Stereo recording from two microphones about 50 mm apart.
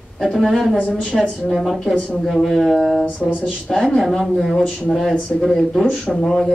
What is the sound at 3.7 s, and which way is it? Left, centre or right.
Speech, centre.